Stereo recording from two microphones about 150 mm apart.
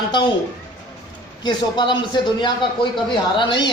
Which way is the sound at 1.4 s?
30° left (ahead or behind).